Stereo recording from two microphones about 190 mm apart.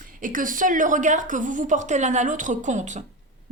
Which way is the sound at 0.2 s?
45° right (ahead or behind).